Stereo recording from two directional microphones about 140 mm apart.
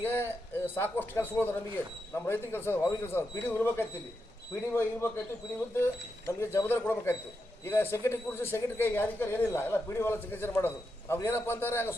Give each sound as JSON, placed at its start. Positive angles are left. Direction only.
{"t": 0.0, "sound": "a man's voice", "side_deg": 15}